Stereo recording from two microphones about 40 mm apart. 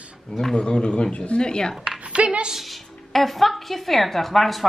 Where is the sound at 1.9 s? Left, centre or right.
Right.